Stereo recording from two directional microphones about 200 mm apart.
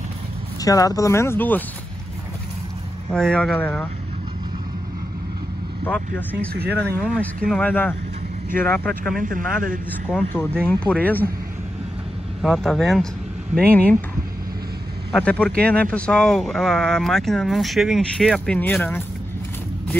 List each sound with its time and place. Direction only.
0.6 s speech: 15° left (ahead or behind)
3.1 s speech: 5° left (ahead or behind)
5.9 s speech: 5° left (ahead or behind)
9.2 s a man's voice: 45° right (ahead or behind)
10.0 s speech: 10° left (ahead or behind)
12.4 s speech: centre (ahead or behind)
15.1 s speech: 5° left (ahead or behind)